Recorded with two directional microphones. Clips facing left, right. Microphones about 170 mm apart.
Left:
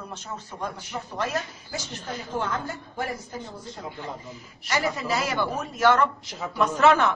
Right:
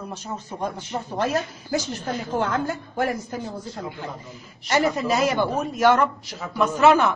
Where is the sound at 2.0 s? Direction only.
65° right (ahead or behind).